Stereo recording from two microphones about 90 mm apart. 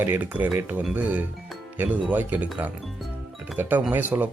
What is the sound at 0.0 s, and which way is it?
Speech, 20° right (ahead or behind).